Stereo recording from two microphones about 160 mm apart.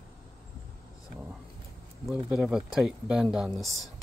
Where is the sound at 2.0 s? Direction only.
5° right (ahead or behind).